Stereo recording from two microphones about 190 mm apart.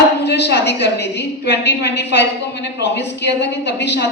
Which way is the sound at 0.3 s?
65° left (ahead or behind).